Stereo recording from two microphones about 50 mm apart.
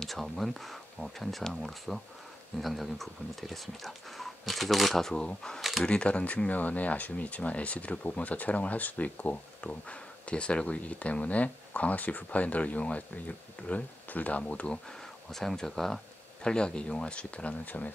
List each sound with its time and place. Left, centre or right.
0.0 s speech: centre
5.6 s camera: centre
5.9 s speech: left
15.3 s speech: centre
16.4 s speech: centre